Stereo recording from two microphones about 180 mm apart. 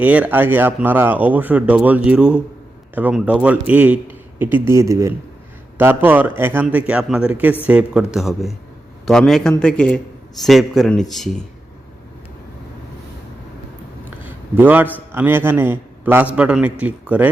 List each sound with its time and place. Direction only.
0.0 s a man's voice: 10° right (ahead or behind)
14.3 s a sound: 10° right (ahead or behind)
15.1 s speech: 10° right (ahead or behind)